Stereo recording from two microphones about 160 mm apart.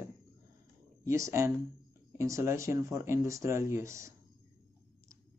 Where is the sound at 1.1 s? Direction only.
20° right (ahead or behind).